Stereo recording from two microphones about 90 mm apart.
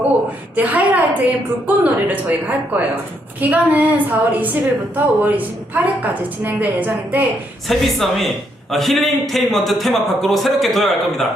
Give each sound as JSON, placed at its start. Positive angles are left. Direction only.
{"t": 0.5, "sound": "a woman's voice", "side_deg": -20}
{"t": 7.7, "sound": "a man's voice", "side_deg": 0}